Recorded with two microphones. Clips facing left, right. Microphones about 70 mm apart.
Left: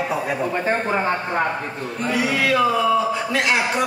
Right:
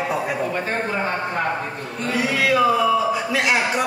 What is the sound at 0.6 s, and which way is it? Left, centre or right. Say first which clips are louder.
Speech: left 3 dB; left.